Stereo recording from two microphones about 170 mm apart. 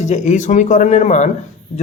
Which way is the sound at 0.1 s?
45° left (ahead or behind).